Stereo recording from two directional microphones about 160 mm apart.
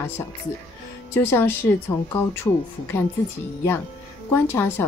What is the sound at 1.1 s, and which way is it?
Speech, 15° left (ahead or behind).